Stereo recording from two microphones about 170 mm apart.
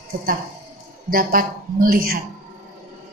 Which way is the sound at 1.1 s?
55° right (ahead or behind).